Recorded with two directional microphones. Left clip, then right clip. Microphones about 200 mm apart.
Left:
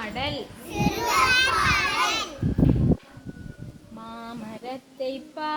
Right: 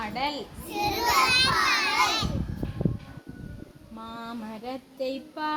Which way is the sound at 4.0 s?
65° right (ahead or behind).